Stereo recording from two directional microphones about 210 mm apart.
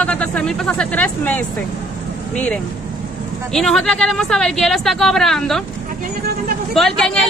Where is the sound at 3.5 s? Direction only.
Centre (ahead or behind).